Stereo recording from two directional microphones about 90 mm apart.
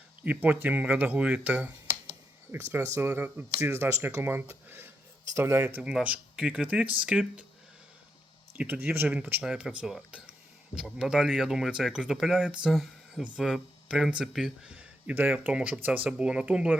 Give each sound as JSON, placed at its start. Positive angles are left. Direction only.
{"t": 0.3, "sound": "speech", "side_deg": -20}
{"t": 5.6, "sound": "speech", "side_deg": -15}
{"t": 8.5, "sound": "speech", "side_deg": -25}
{"t": 9.4, "sound": "speech", "side_deg": -10}